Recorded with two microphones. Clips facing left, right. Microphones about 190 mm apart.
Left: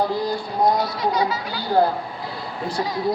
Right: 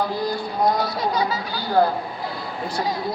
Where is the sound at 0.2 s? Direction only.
25° left (ahead or behind).